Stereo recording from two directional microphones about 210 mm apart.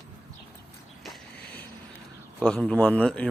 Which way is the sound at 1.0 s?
5° left (ahead or behind).